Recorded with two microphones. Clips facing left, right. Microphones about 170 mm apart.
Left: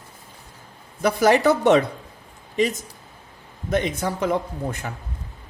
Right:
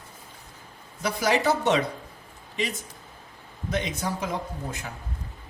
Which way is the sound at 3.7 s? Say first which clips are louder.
Left 6 dB; 55° left (ahead or behind).